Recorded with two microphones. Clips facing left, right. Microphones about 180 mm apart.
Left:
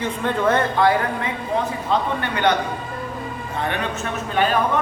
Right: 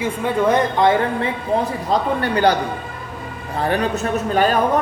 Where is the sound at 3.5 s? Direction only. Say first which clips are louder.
Right 6 dB; 35° right (ahead or behind).